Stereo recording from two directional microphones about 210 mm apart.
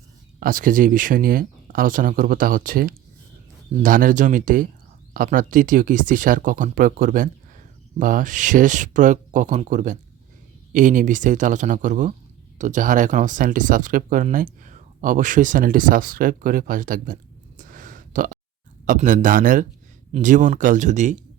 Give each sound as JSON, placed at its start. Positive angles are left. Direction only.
{"t": 0.3, "sound": "speech", "side_deg": -40}
{"t": 17.6, "sound": "a sound", "side_deg": -40}
{"t": 18.9, "sound": "speech", "side_deg": -40}